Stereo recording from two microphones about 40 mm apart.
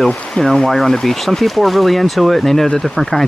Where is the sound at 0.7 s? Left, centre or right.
Centre.